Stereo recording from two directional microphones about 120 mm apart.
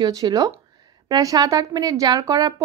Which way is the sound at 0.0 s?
30° right (ahead or behind).